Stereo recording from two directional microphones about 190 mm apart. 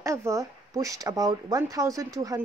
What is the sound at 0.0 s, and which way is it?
Speech, 15° right (ahead or behind).